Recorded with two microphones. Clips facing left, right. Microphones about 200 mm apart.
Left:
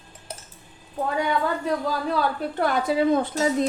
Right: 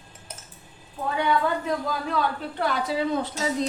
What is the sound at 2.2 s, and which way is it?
A woman's voice, 50° left (ahead or behind).